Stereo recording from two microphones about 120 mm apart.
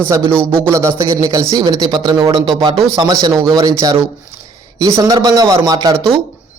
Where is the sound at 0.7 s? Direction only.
25° right (ahead or behind).